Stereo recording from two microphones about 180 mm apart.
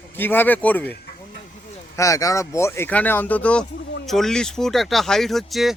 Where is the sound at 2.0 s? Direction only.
20° left (ahead or behind).